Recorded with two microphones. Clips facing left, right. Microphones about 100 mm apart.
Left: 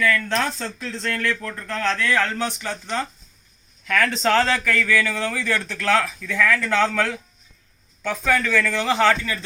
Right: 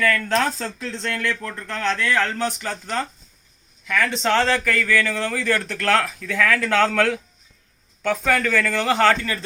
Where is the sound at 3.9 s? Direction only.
15° right (ahead or behind).